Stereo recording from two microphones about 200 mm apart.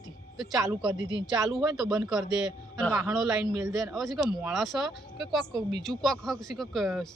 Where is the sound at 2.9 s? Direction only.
15° right (ahead or behind).